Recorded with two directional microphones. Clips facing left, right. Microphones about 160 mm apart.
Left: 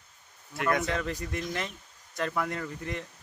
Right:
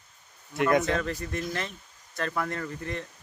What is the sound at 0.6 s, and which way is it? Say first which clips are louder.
Speech: right 5 dB; 20° right (ahead or behind).